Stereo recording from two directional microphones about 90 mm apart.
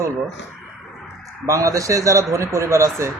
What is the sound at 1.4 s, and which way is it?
Speech, 35° right (ahead or behind).